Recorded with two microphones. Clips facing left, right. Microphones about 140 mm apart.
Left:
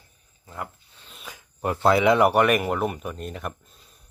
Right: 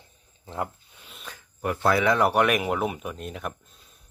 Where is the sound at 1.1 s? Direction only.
10° left (ahead or behind).